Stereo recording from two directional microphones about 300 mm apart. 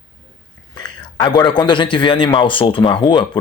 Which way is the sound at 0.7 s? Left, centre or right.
Centre.